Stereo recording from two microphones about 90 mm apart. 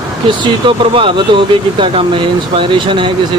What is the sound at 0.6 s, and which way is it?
Speech, 75° right (ahead or behind).